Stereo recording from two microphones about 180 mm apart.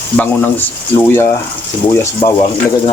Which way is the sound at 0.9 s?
20° left (ahead or behind).